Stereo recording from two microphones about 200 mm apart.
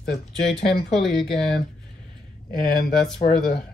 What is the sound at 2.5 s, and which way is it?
Speech, 50° left (ahead or behind).